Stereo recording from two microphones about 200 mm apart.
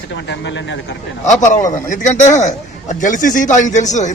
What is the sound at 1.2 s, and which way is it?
A man's voice, 35° left (ahead or behind).